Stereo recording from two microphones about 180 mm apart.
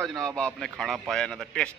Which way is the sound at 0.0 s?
Centre (ahead or behind).